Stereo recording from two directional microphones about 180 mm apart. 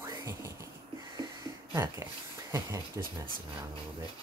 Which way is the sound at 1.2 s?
20° right (ahead or behind).